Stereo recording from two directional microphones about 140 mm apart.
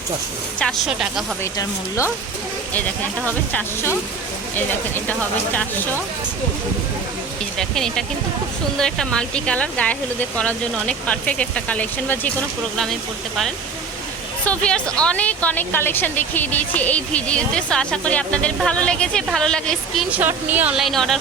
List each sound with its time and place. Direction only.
0.6 s speech: centre (ahead or behind)
3.5 s a woman's voice: 15° left (ahead or behind)
7.6 s a woman's voice: 5° left (ahead or behind)
12.7 s a woman's voice: centre (ahead or behind)
20.1 s speech: 10° right (ahead or behind)